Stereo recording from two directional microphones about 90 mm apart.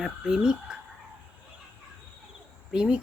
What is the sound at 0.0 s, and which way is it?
Speech, 5° right (ahead or behind).